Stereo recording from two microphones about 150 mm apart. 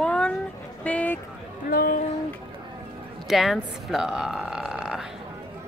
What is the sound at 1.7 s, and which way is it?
Speech, 75° left (ahead or behind).